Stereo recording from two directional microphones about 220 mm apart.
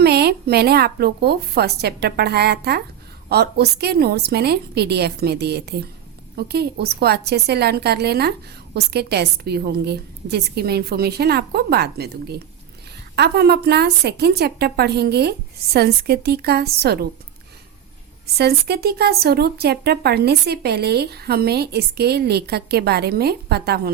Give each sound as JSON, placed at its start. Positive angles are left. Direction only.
{"t": 0.0, "sound": "a woman's voice", "side_deg": -45}
{"t": 18.3, "sound": "a woman's voice", "side_deg": -45}